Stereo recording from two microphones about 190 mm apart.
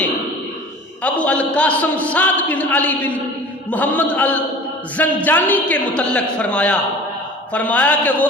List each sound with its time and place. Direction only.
1.0 s a man's voice: 5° left (ahead or behind)